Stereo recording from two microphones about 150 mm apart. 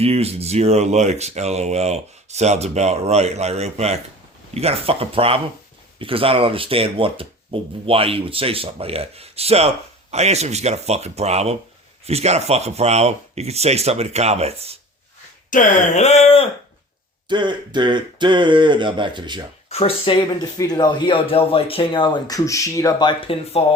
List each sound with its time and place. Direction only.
0.0 s speech: 45° right (ahead or behind)
15.4 s speech: 60° left (ahead or behind); by 16.5 s 40° left (ahead or behind)
17.2 s speech: 30° right (ahead or behind)
19.7 s speech: 40° left (ahead or behind)